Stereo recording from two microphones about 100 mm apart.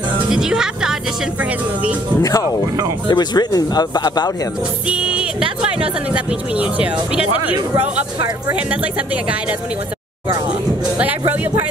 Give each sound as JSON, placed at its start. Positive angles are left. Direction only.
{"t": 0.3, "sound": "music", "side_deg": -5}
{"t": 3.1, "sound": "speech", "side_deg": 45}
{"t": 4.8, "sound": "speech", "side_deg": -10}